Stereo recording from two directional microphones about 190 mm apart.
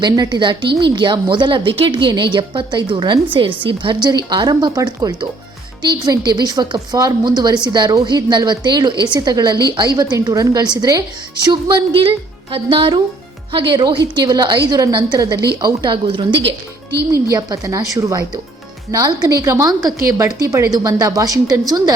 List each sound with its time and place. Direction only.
0.0 s a woman's voice: 25° right (ahead or behind)